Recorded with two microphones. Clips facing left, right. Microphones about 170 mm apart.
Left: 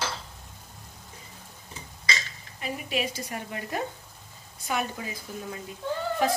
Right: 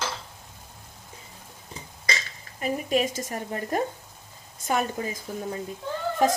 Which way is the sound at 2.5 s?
45° right (ahead or behind).